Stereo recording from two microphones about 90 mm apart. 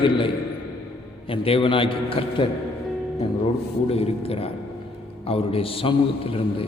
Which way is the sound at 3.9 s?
90° left.